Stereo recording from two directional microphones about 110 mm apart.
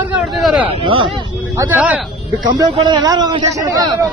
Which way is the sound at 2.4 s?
40° right (ahead or behind).